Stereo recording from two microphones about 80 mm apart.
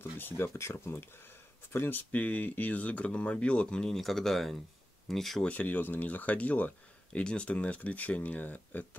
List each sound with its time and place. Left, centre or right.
0.4 s speech: left; by 5.5 s centre
5.5 s speech: left